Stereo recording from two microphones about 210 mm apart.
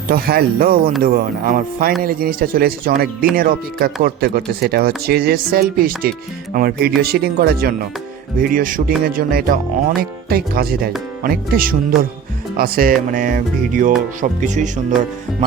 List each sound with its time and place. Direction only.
0.1 s speech: 45° right (ahead or behind)